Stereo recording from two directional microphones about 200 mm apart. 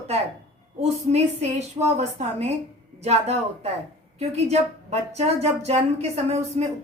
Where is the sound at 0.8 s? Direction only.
35° right (ahead or behind).